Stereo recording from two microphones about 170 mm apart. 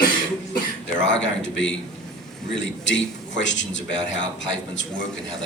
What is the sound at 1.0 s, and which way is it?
Speech, 90° left.